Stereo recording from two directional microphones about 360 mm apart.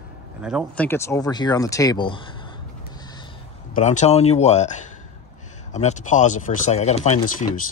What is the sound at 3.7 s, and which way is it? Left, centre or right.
Speech, centre.